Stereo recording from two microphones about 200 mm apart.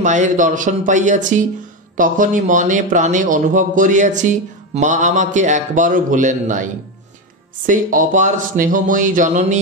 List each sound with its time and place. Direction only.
0.0 s speech: 40° right (ahead or behind)